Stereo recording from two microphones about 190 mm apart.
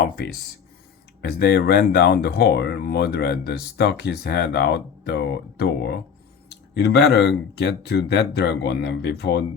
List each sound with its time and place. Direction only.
1.4 s speech: 55° left (ahead or behind)